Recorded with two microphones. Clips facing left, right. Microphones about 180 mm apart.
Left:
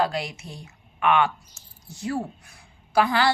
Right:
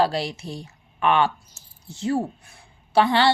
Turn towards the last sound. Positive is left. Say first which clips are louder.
# right 3 dB
turn(degrees=-25)  # may be behind; listen again after turning